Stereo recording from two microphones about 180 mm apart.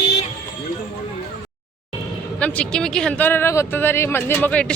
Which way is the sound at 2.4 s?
5° left (ahead or behind).